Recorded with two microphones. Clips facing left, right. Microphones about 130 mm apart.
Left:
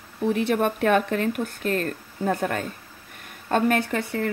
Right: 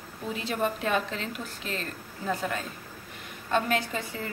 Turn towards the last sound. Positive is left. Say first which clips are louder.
# left 6 dB
turn(degrees=65)  # may be behind; listen again after turning